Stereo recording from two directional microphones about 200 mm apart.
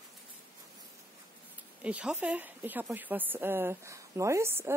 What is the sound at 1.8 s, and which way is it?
A woman's voice, 5° right (ahead or behind).